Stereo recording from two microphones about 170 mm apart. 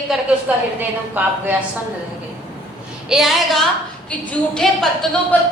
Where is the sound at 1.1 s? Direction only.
10° right (ahead or behind).